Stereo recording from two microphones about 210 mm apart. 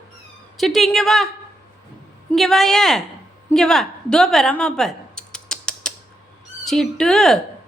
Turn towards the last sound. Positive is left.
turn(degrees=0)  # may be behind; listen again after turning